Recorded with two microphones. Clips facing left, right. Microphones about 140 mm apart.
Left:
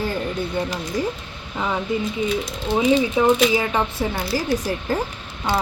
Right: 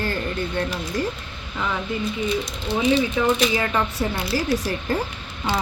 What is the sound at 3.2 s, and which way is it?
Speech, 20° left (ahead or behind).